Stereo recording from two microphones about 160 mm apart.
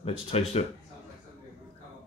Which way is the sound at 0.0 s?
40° left (ahead or behind).